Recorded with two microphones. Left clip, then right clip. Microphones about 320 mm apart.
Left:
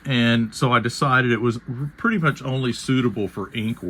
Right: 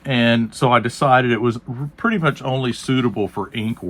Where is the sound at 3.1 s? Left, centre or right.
Right.